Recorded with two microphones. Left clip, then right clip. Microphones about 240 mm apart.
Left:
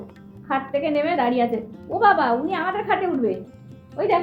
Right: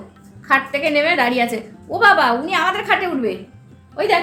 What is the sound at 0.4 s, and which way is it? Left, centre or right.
A woman's voice, centre.